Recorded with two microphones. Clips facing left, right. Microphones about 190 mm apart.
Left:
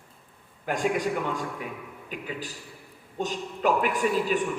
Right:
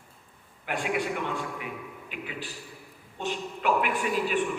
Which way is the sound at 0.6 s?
40° left (ahead or behind).